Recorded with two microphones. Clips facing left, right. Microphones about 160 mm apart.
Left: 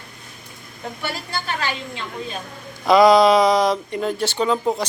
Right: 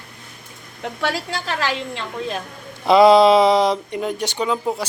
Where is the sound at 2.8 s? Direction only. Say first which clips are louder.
Right 1 dB; 25° right (ahead or behind).